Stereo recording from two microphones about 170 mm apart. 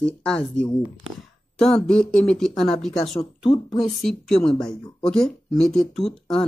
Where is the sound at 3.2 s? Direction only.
35° left (ahead or behind).